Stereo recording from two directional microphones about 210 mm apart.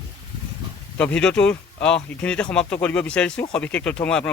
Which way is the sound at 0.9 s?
5° left (ahead or behind).